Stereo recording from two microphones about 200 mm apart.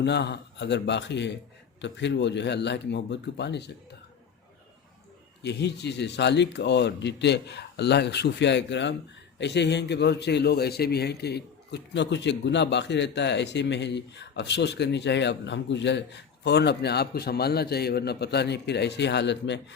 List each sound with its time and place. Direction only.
0.0 s a man's voice: 60° left (ahead or behind)
5.4 s a man's voice: 60° left (ahead or behind)